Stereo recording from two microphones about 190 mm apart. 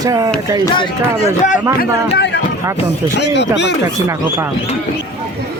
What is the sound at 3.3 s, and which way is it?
Speech, 65° left (ahead or behind).